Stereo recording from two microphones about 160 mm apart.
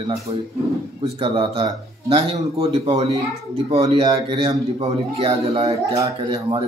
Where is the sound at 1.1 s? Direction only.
35° right (ahead or behind).